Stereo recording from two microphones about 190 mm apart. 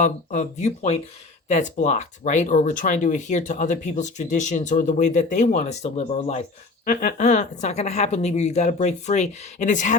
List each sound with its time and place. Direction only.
0.0 s speech: 40° left (ahead or behind)
6.8 s speech: 45° left (ahead or behind)